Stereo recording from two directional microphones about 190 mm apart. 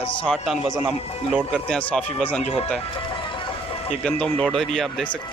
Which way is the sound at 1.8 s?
5° left (ahead or behind).